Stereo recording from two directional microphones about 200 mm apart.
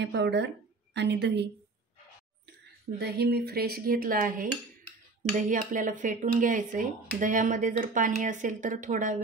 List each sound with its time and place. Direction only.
0.0 s a woman's voice: 60° right (ahead or behind)
3.0 s speech: 55° right (ahead or behind)